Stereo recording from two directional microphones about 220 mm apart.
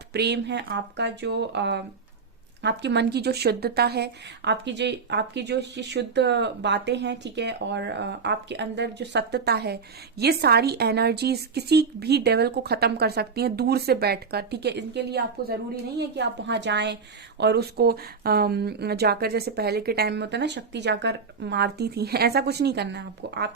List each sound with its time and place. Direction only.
0.1 s a woman's voice: 50° right (ahead or behind)